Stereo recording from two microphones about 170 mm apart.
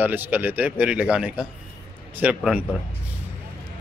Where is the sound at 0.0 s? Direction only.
10° right (ahead or behind).